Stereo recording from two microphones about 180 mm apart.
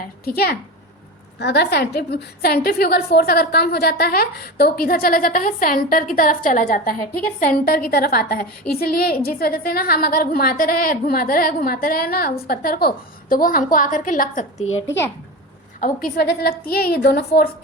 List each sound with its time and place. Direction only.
0.0 s a woman's voice: 55° left (ahead or behind)
1.4 s a woman's voice: 70° left (ahead or behind); by 14.7 s 45° left (ahead or behind)
15.8 s a woman's voice: 55° left (ahead or behind)